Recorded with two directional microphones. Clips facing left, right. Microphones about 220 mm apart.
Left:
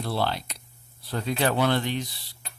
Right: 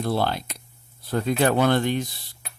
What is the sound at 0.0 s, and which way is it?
Speech, 50° right (ahead or behind).